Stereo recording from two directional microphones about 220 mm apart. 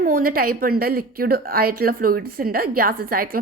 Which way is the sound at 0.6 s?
40° right (ahead or behind).